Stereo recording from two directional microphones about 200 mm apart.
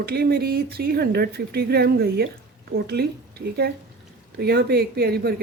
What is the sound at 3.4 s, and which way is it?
Speech, 50° right (ahead or behind).